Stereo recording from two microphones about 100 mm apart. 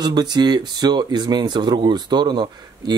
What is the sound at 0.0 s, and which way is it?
Speech, 45° right (ahead or behind).